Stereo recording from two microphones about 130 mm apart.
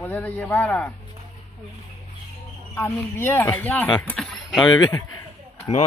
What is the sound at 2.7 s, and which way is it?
Speech, 15° left (ahead or behind).